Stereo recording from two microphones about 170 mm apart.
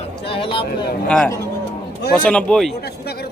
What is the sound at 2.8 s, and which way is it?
Speech, 70° left (ahead or behind).